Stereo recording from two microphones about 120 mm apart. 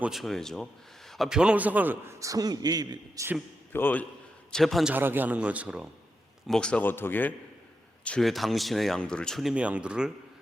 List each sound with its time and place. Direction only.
0.0 s a man's voice: centre (ahead or behind); by 3.2 s 35° right (ahead or behind)
3.7 s speech: 15° left (ahead or behind)
4.5 s speech: centre (ahead or behind)
4.9 s a man's voice: 15° right (ahead or behind)
6.5 s speech: 10° left (ahead or behind)
8.0 s speech: 5° left (ahead or behind)